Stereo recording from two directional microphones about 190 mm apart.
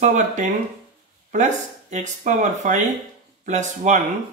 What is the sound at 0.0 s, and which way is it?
Speech, 40° right (ahead or behind).